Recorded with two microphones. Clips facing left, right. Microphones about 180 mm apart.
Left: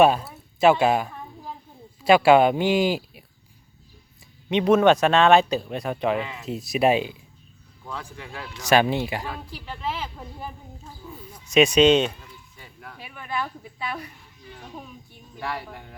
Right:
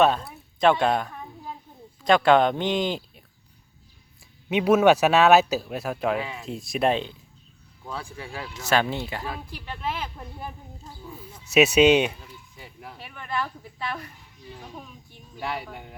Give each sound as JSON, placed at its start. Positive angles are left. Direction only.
{"t": 0.0, "sound": "a sound", "side_deg": 10}
{"t": 2.0, "sound": "speech", "side_deg": 5}
{"t": 4.4, "sound": "speech", "side_deg": -5}
{"t": 7.9, "sound": "speech", "side_deg": -15}
{"t": 8.6, "sound": "speech", "side_deg": 15}
{"t": 9.3, "sound": "speech", "side_deg": -5}
{"t": 12.5, "sound": "a sound", "side_deg": -20}
{"t": 13.0, "sound": "speech", "side_deg": 5}
{"t": 15.6, "sound": "speech", "side_deg": -5}